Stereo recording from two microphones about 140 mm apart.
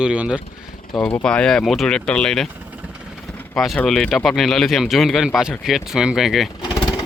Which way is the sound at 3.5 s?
5° left (ahead or behind).